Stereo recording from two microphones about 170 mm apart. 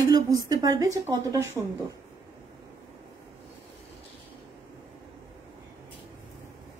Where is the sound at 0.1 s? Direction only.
20° right (ahead or behind).